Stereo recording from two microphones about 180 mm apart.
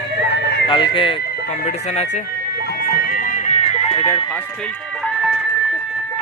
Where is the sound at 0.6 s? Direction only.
25° left (ahead or behind).